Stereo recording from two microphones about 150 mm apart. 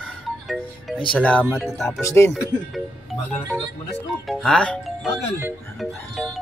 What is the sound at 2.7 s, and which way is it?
Music, centre (ahead or behind).